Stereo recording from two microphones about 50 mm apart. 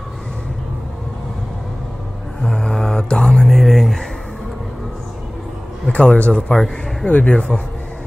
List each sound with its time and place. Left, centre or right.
2.4 s mantra: centre
3.4 s a sound: centre
5.9 s a man's voice: left
6.3 s a man's voice: centre